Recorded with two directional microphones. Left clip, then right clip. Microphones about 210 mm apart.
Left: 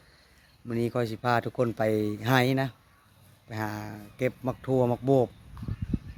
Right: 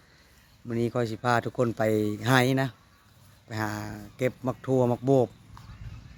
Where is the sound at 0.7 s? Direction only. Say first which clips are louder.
Right 1 dB; centre (ahead or behind).